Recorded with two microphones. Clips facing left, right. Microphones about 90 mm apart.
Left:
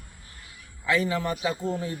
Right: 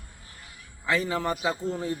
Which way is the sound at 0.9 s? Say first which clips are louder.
Left 1 dB; 35° right (ahead or behind).